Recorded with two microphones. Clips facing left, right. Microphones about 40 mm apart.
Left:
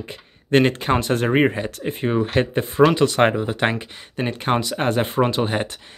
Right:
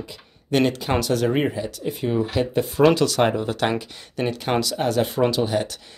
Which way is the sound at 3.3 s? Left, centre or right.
Left.